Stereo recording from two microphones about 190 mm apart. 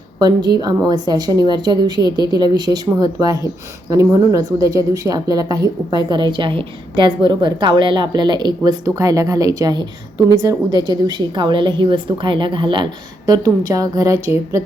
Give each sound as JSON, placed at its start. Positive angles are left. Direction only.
{"t": 0.2, "sound": "speech", "side_deg": -20}